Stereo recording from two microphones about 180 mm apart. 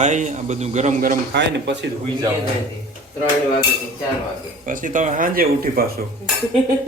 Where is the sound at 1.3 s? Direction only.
75° right (ahead or behind).